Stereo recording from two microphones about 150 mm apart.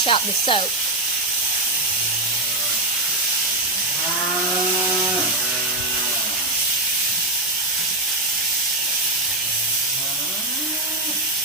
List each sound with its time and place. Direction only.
0.0 s speech: 35° left (ahead or behind)